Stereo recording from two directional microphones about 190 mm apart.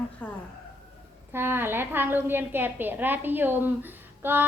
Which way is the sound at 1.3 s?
10° right (ahead or behind).